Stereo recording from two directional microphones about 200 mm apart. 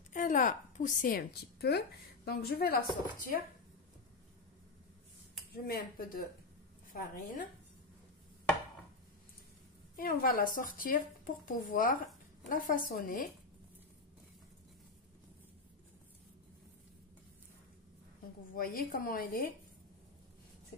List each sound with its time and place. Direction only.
0.1 s a woman's voice: 40° left (ahead or behind)
5.7 s speech: 45° left (ahead or behind)
9.9 s speech: 45° left (ahead or behind)
18.5 s speech: 45° left (ahead or behind)